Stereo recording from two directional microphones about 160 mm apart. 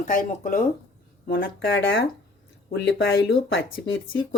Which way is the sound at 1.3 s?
90° left.